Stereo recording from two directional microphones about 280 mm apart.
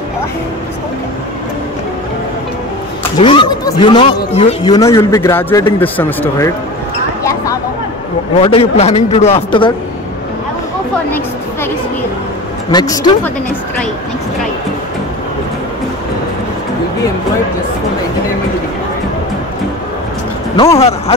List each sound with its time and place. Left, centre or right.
3.2 s speech: centre
8.4 s a man's voice: centre
12.7 s speech: centre
20.5 s a man's voice: centre